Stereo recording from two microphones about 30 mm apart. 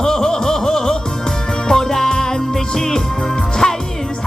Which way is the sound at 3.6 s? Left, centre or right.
Centre.